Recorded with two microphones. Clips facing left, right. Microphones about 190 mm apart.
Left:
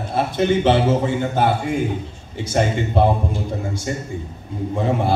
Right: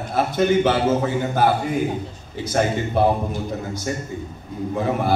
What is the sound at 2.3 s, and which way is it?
Speech, 25° left (ahead or behind).